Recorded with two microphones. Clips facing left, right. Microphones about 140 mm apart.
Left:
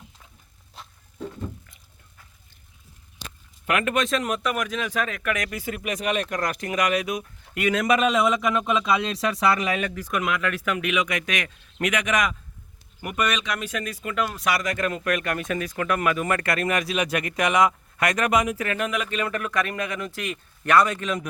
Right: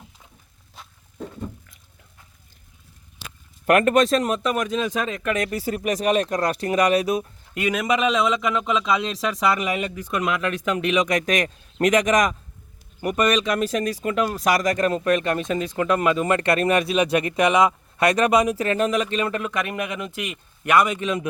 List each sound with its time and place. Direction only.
3.7 s speech: 40° right (ahead or behind)
7.6 s speech: 15° right (ahead or behind)
8.1 s speech: 5° left (ahead or behind)
9.8 s speech: 15° right (ahead or behind); by 19.0 s 35° right (ahead or behind)
19.0 s speech: 20° right (ahead or behind)